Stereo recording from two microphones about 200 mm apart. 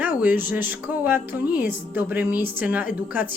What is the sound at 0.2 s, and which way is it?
Speech, 10° right (ahead or behind).